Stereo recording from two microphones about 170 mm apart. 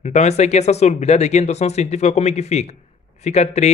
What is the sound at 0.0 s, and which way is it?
A man's voice, 40° left (ahead or behind).